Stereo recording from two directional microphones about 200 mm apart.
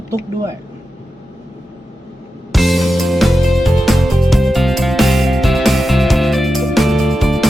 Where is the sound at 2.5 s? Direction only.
Centre (ahead or behind).